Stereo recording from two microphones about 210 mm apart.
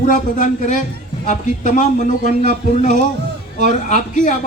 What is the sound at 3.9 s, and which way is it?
Speech, 35° left (ahead or behind).